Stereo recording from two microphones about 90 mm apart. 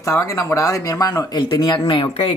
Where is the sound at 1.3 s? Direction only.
50° left (ahead or behind); by 2.3 s 70° left (ahead or behind).